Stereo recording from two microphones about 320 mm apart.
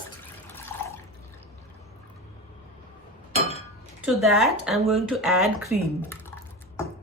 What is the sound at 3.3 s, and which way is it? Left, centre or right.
Chink, centre.